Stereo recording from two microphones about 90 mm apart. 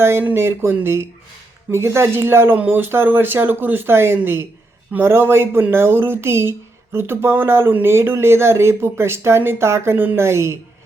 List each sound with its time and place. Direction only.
0.0 s speech: 25° right (ahead or behind)